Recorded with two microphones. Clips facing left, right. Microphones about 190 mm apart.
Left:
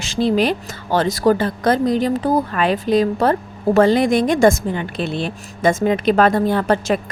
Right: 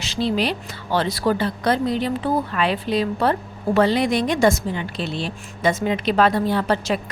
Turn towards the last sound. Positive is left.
turn(degrees=50)  # may be behind; listen again after turning